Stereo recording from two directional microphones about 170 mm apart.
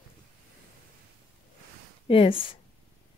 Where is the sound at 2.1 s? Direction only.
30° left (ahead or behind).